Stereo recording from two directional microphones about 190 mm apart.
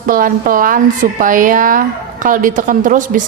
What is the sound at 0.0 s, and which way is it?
A woman's voice, 45° right (ahead or behind).